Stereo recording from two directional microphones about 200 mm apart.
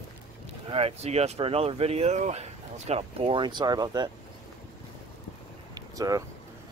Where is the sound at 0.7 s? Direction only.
30° right (ahead or behind).